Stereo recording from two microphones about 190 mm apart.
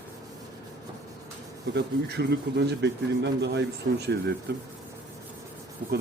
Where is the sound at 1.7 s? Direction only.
60° right (ahead or behind).